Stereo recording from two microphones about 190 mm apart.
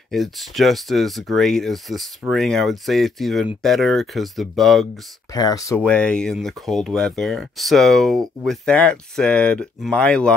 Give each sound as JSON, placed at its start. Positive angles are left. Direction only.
{"t": 0.1, "sound": "speech", "side_deg": 0}
{"t": 5.3, "sound": "speech", "side_deg": 20}
{"t": 5.8, "sound": "speech", "side_deg": 5}